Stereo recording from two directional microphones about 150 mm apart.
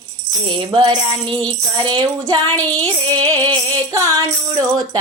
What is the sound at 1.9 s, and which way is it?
Music, 30° right (ahead or behind).